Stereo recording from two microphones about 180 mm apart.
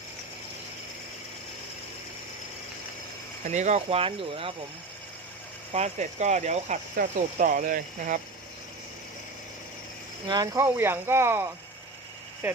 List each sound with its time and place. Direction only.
3.4 s speech: 40° right (ahead or behind)
5.7 s speech: 40° right (ahead or behind)
10.2 s speech: 20° right (ahead or behind)